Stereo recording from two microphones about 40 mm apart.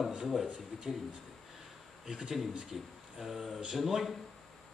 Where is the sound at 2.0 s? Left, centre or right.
Centre.